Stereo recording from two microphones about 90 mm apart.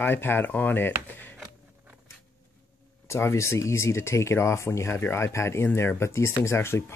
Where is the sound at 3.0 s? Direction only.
30° left (ahead or behind).